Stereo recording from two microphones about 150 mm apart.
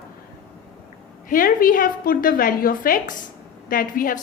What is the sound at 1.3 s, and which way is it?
A woman's voice, 70° left (ahead or behind).